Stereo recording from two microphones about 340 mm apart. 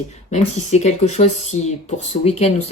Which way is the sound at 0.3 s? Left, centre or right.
Centre.